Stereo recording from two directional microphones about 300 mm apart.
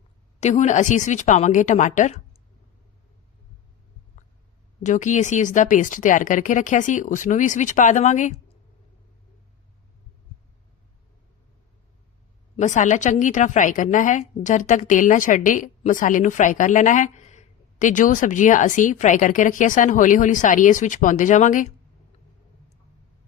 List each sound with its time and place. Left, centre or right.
0.3 s a woman's voice: left
4.8 s a woman's voice: left
12.5 s a woman's voice: left